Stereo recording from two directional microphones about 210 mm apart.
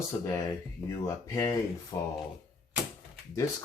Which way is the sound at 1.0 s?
15° left (ahead or behind).